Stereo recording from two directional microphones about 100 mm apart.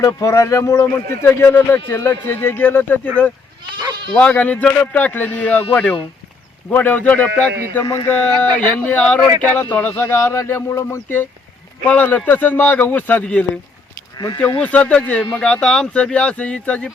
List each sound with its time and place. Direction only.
0.0 s speech: 30° left (ahead or behind)
4.1 s speech: 10° left (ahead or behind)
14.6 s speech: 15° left (ahead or behind)